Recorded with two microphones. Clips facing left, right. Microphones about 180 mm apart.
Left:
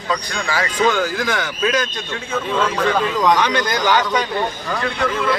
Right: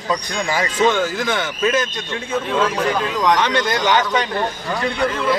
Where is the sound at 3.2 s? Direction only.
5° left (ahead or behind).